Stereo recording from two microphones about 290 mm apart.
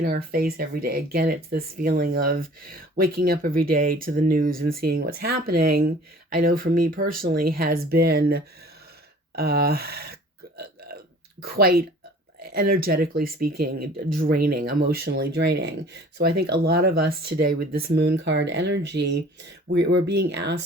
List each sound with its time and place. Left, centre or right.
0.0 s speech: right
10.6 s burping: right
12.4 s speech: right